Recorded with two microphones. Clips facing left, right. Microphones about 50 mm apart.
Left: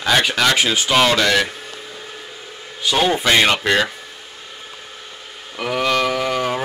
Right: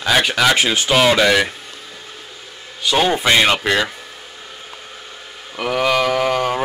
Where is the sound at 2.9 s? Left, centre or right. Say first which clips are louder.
Right 1 dB; centre.